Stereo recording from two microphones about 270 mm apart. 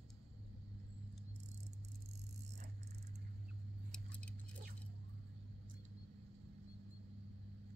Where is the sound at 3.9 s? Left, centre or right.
Centre.